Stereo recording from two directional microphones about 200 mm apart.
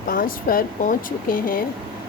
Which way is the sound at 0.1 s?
45° left (ahead or behind).